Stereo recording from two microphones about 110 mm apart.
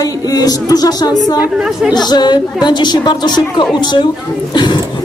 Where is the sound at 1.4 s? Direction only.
10° right (ahead or behind).